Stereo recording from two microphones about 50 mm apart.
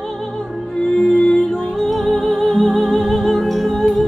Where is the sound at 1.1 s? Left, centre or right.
Centre.